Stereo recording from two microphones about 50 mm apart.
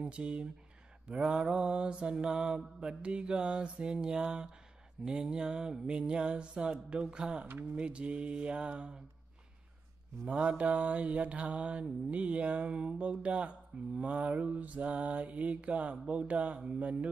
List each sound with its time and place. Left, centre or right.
0.0 s speech: right
5.0 s mantra: centre
7.7 s speech: right
10.2 s speech: right